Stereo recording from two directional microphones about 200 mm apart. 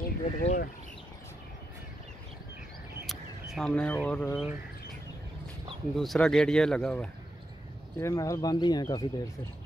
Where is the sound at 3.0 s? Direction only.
Centre (ahead or behind).